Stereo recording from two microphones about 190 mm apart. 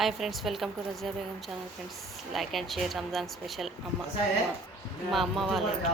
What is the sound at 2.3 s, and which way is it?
A woman's voice, centre (ahead or behind).